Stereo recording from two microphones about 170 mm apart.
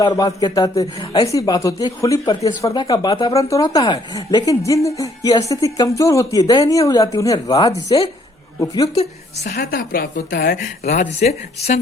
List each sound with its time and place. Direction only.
0.0 s speech: 20° left (ahead or behind)
9.4 s a woman's voice: 65° left (ahead or behind)
10.8 s speech: 45° left (ahead or behind)